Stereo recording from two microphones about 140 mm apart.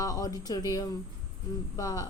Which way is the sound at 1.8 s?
25° left (ahead or behind).